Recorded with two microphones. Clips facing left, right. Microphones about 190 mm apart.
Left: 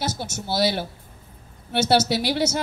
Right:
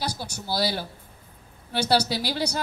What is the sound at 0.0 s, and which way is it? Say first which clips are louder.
A woman's voice: left 3 dB; 25° left (ahead or behind).